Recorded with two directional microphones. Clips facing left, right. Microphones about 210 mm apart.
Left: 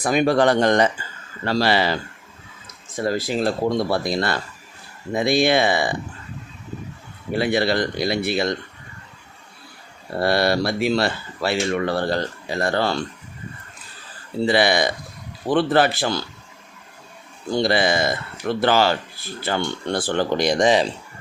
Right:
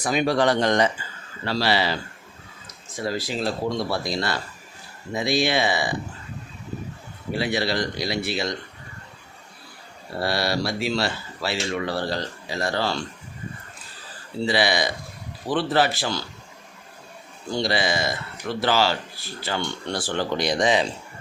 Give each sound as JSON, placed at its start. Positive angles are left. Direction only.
{"t": 0.0, "sound": "speech", "side_deg": 50}
{"t": 3.0, "sound": "speech", "side_deg": 50}
{"t": 7.3, "sound": "speech", "side_deg": 55}
{"t": 10.2, "sound": "speech", "side_deg": 55}
{"t": 14.4, "sound": "speech", "side_deg": 55}
{"t": 17.5, "sound": "speech", "side_deg": 55}